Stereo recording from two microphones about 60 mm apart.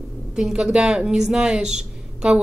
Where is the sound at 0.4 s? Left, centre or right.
Centre.